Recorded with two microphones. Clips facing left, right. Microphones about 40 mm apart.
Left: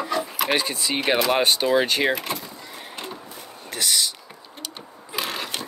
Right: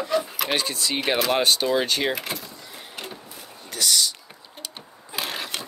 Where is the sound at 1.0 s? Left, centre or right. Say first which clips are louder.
Left 2 dB; centre.